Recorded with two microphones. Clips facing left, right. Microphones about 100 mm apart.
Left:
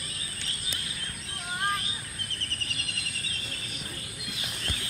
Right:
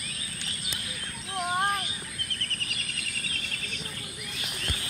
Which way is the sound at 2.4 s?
30° left (ahead or behind).